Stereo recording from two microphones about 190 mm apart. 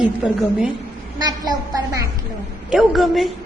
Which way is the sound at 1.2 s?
20° right (ahead or behind).